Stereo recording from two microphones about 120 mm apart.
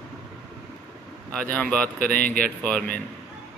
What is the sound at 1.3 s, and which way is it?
Speech, 10° left (ahead or behind).